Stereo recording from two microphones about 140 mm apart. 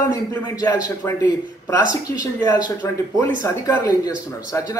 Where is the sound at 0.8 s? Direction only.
25° left (ahead or behind).